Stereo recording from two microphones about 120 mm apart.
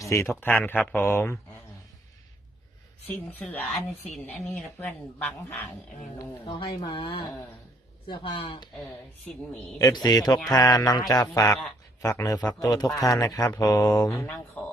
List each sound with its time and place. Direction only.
0.0 s speech: 25° left (ahead or behind)
3.1 s speech: 15° left (ahead or behind)
6.1 s speech: 45° left (ahead or behind)
9.7 s a man's voice: 30° left (ahead or behind)
14.1 s speech: 15° left (ahead or behind)